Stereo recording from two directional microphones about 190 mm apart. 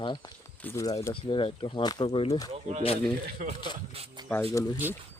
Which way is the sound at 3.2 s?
55° right (ahead or behind).